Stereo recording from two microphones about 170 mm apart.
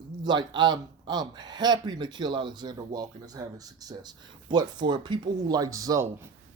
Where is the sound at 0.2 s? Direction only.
25° right (ahead or behind).